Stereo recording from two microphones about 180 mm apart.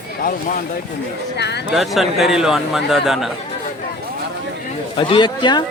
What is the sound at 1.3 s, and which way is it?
Speech, 70° left (ahead or behind).